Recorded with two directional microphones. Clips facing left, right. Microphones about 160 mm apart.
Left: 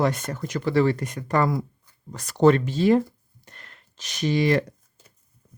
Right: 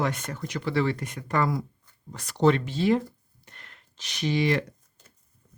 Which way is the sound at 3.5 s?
40° left (ahead or behind).